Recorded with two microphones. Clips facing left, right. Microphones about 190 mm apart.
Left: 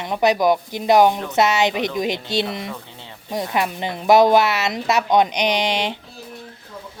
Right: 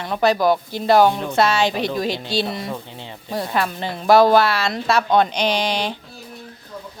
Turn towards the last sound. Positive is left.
turn(degrees=20)  # may be behind; listen again after turning